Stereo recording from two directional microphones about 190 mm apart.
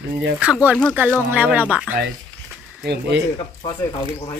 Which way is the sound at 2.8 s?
60° right (ahead or behind).